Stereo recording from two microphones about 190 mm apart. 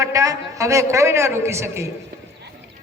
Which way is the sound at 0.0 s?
15° right (ahead or behind).